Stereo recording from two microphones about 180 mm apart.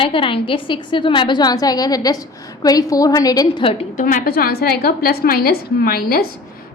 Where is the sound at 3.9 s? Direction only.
50° left (ahead or behind).